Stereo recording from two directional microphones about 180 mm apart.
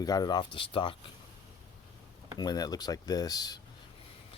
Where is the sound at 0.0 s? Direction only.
20° left (ahead or behind).